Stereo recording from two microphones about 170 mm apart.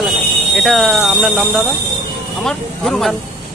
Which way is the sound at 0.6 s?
Centre (ahead or behind).